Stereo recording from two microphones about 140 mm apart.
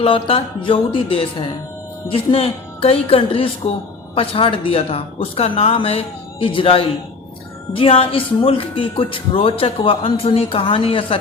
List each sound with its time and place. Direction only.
0.0 s a woman's voice: 40° left (ahead or behind)